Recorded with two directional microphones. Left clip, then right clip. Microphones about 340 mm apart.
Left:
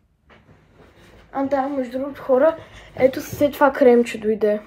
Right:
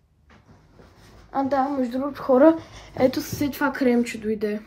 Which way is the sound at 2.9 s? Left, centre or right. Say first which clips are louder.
Left 3 dB; centre.